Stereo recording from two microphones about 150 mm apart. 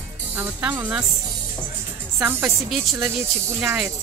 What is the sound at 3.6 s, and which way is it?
Speech, 15° right (ahead or behind).